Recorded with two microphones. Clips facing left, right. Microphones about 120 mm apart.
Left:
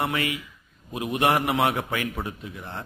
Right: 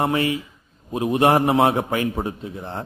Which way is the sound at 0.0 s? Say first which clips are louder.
Right 6 dB; 30° right (ahead or behind).